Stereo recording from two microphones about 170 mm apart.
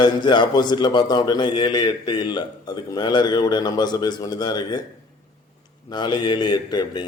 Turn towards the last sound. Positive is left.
turn(degrees=25)  # may be behind; listen again after turning